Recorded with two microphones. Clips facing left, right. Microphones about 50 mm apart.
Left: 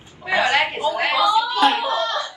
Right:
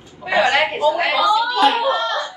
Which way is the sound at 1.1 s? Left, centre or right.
Left.